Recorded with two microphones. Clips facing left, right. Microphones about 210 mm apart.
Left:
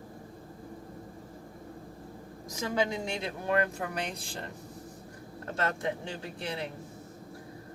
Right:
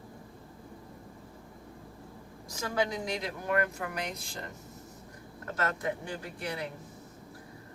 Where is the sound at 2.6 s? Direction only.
20° left (ahead or behind).